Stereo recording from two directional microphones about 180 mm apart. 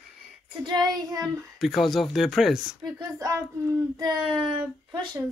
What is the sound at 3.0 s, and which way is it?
Speech, 20° right (ahead or behind).